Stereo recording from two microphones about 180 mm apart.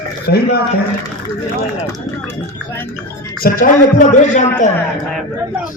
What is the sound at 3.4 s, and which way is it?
A man's voice, 50° left (ahead or behind).